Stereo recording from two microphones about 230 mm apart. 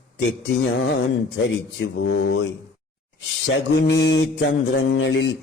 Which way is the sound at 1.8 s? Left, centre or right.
Left.